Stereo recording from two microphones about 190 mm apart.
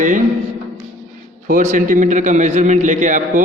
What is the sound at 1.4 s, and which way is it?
A man's voice, 45° right (ahead or behind).